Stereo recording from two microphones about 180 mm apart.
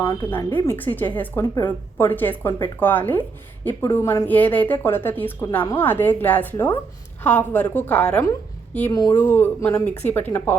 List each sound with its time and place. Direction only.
0.3 s speech: 10° left (ahead or behind)